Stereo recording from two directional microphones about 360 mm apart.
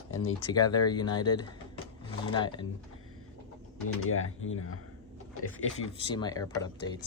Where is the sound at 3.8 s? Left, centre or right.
Left.